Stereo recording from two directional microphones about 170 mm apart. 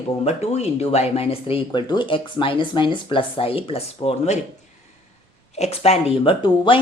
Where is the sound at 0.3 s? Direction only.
40° left (ahead or behind).